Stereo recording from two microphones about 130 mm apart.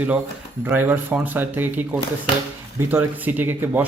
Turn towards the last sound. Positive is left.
turn(degrees=-15)  # may be behind; listen again after turning